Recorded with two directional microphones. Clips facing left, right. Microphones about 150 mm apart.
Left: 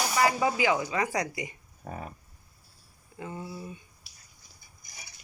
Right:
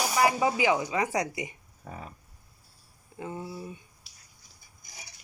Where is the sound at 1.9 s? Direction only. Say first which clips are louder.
Left 3 dB; 40° left (ahead or behind).